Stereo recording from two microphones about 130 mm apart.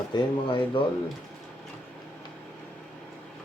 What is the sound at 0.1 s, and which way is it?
Speech, 35° left (ahead or behind).